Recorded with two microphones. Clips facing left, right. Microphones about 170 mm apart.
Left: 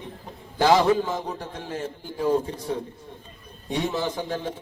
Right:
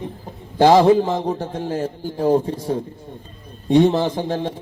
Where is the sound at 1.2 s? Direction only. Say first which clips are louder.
Right 9 dB; 30° right (ahead or behind).